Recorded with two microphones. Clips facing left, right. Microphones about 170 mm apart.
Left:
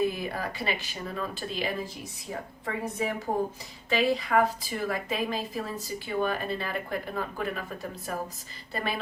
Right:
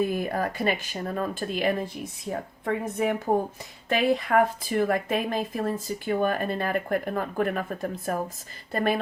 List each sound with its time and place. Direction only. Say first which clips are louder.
0.0 s a woman's voice: right 3 dB; 50° right (ahead or behind)